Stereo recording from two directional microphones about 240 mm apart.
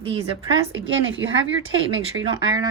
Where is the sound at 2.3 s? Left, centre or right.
Centre.